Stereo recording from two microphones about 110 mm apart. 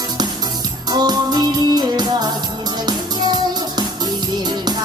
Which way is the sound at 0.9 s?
40° right (ahead or behind).